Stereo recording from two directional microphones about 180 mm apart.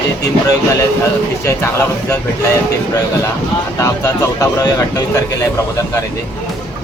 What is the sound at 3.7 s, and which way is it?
Speech, 15° left (ahead or behind).